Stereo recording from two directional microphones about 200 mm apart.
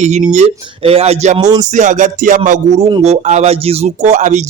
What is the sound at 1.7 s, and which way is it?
Speech, 40° right (ahead or behind).